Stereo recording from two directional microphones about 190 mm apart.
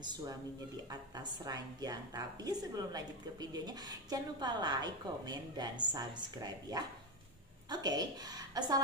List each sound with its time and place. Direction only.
0.0 s a woman's voice: 20° right (ahead or behind)